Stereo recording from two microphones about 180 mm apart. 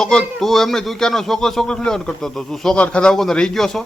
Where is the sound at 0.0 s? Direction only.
5° left (ahead or behind).